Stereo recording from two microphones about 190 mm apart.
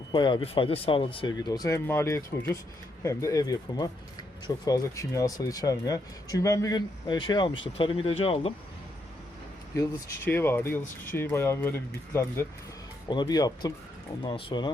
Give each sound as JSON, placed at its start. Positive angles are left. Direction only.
{"t": 0.1, "sound": "speech", "side_deg": 25}
{"t": 9.7, "sound": "speech", "side_deg": 15}
{"t": 13.1, "sound": "speech", "side_deg": 20}